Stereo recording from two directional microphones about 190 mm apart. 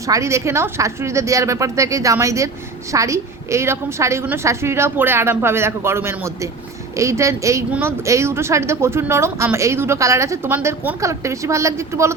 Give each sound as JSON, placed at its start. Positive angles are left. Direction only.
{"t": 0.1, "sound": "a woman's voice", "side_deg": -15}